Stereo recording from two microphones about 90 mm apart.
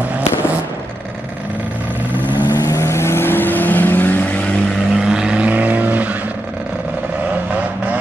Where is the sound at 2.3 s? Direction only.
50° left (ahead or behind); by 4.2 s 20° left (ahead or behind).